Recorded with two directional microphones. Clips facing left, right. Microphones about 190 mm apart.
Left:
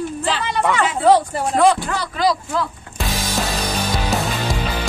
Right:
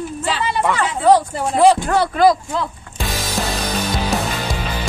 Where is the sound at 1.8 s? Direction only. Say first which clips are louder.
Right 6 dB; 55° right (ahead or behind).